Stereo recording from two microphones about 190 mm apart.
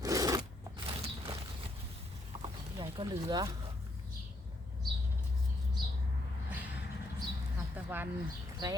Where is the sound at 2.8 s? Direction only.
25° right (ahead or behind).